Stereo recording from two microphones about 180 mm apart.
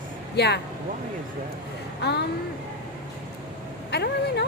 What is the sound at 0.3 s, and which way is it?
Speech, 70° left (ahead or behind).